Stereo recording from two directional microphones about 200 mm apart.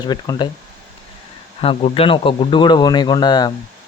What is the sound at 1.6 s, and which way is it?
Speech, 30° left (ahead or behind).